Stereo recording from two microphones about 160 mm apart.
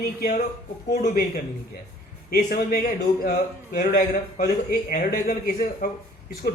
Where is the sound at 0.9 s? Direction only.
70° left (ahead or behind).